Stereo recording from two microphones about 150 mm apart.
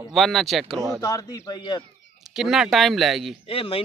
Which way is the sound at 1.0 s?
25° left (ahead or behind).